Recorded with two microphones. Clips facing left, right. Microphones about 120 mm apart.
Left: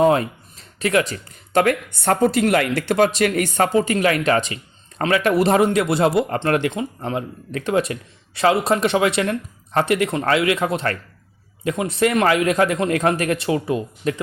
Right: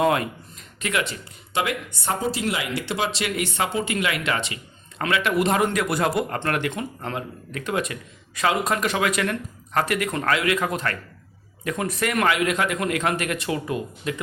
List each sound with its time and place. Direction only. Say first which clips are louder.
0.0 s a man's voice: left 5 dB; 30° left (ahead or behind)
14.0 s a man's voice: left 7 dB; 40° left (ahead or behind)